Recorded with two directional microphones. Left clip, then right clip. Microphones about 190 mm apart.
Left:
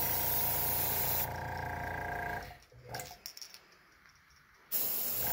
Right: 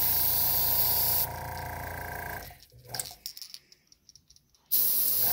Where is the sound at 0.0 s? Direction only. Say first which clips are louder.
Right 3 dB; 40° right (ahead or behind).